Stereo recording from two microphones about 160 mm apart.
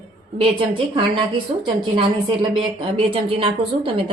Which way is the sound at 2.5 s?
35° right (ahead or behind).